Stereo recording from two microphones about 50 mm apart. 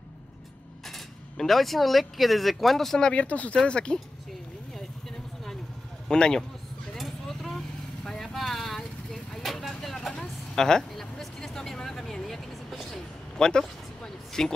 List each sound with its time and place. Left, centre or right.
0.8 s speech: centre
3.1 s speech: left
6.0 s a man's voice: centre
7.0 s vehicle: centre
9.4 s speech: centre
13.4 s a sound: centre